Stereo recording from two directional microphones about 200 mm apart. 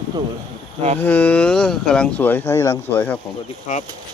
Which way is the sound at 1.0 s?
10° left (ahead or behind).